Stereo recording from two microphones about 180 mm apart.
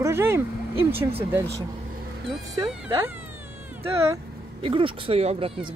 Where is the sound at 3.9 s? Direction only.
15° right (ahead or behind).